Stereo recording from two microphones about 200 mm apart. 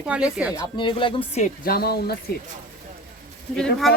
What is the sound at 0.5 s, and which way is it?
Speech, 20° left (ahead or behind).